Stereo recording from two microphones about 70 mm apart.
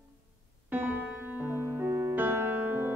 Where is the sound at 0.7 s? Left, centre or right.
Right.